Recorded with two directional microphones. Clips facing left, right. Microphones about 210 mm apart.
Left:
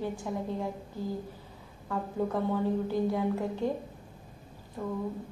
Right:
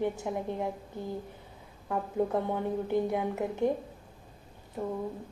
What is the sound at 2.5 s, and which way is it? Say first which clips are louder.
A woman's voice: even; 20° right (ahead or behind).